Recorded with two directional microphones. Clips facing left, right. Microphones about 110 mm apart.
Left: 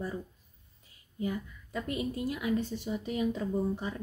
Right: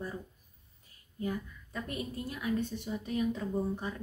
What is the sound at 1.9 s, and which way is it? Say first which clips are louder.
A woman's voice: left 6 dB; 20° left (ahead or behind).